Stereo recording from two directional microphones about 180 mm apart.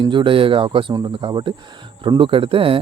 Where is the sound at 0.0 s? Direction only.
25° right (ahead or behind).